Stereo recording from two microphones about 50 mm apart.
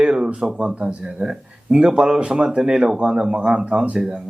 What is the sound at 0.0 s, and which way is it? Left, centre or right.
Speech, right.